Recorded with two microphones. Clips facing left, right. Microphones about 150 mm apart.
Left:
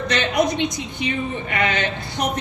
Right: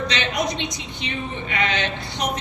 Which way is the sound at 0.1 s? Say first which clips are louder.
Left 5 dB; 50° left (ahead or behind).